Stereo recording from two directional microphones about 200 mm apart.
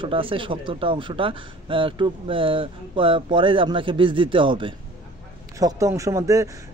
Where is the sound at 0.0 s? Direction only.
25° right (ahead or behind).